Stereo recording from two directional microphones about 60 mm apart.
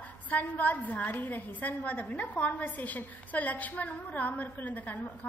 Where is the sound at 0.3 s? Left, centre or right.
Left.